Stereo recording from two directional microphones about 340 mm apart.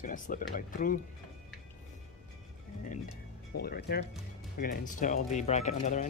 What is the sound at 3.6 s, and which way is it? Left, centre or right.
Speech, left.